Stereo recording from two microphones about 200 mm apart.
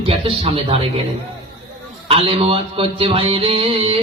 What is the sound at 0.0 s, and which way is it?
Mantra, 30° right (ahead or behind).